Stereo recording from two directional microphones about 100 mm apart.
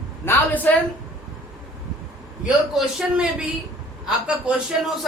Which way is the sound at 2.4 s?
5° right (ahead or behind).